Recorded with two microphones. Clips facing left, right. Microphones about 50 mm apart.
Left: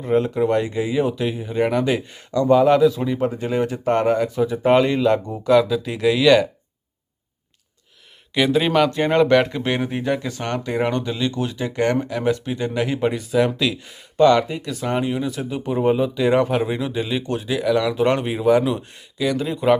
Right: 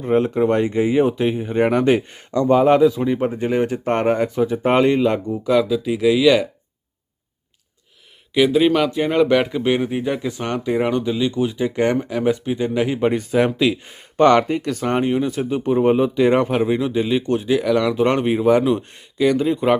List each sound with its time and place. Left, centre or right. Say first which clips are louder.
0.0 s speech: right 2 dB; right
5.4 s speech: left 1 dB; centre
8.3 s speech: right 3 dB; centre
13.1 s speech: right 2 dB; right